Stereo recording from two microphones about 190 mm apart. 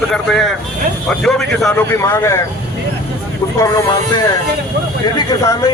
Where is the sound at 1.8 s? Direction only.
15° left (ahead or behind).